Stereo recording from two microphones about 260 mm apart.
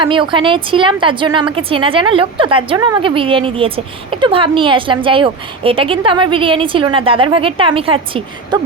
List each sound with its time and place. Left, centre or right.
0.0 s a woman's voice: centre